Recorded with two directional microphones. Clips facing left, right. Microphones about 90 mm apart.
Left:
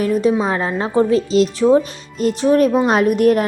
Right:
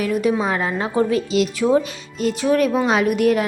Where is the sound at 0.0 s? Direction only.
30° left (ahead or behind).